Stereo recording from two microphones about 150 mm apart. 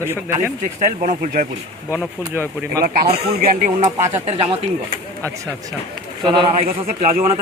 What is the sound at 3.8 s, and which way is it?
Speech, 45° right (ahead or behind).